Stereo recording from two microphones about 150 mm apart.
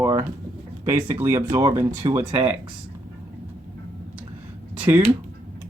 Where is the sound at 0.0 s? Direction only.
20° right (ahead or behind).